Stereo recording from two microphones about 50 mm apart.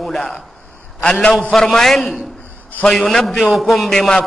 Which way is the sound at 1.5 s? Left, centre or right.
Centre.